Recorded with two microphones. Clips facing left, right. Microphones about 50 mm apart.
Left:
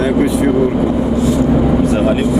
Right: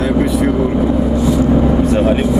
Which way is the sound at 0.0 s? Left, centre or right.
Centre.